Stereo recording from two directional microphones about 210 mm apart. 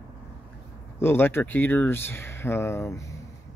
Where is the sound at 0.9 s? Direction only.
10° left (ahead or behind).